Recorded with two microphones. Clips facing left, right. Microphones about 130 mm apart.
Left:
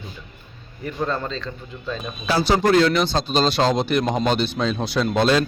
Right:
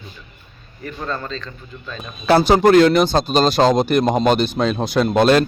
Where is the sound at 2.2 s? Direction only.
55° right (ahead or behind).